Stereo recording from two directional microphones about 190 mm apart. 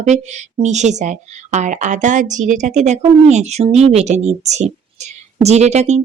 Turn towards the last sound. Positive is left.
turn(degrees=-35)  # may be behind; listen again after turning